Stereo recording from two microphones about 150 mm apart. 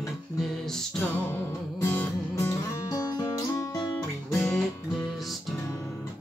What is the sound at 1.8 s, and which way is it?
Music, 15° left (ahead or behind).